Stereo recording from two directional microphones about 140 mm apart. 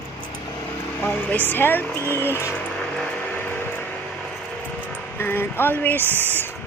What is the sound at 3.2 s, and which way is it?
Music, 15° left (ahead or behind).